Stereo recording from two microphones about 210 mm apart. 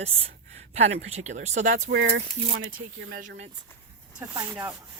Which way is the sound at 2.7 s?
45° right (ahead or behind).